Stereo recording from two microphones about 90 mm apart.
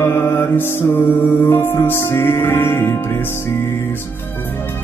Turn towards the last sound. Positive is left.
turn(degrees=25)  # may be behind; listen again after turning